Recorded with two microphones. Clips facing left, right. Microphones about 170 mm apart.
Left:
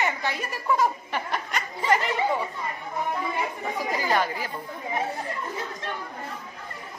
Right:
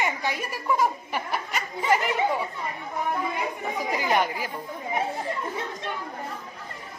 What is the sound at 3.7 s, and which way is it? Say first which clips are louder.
Speech: right 1 dB; 15° right (ahead or behind).